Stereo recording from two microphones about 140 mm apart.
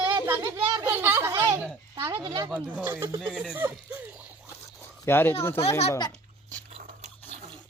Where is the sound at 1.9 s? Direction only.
30° right (ahead or behind).